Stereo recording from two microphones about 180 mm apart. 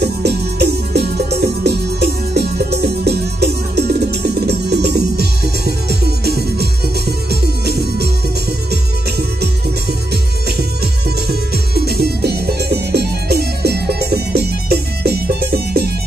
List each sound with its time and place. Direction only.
0.0 s music: 65° right (ahead or behind)
11.2 s music: 60° right (ahead or behind)